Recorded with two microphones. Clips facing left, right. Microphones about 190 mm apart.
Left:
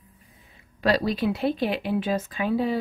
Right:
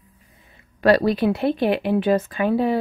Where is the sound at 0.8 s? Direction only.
60° right (ahead or behind).